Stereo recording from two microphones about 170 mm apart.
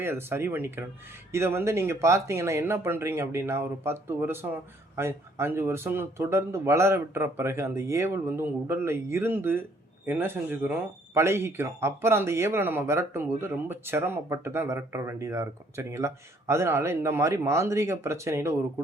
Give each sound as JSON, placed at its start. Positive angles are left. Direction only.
{"t": 0.0, "sound": "speech", "side_deg": -15}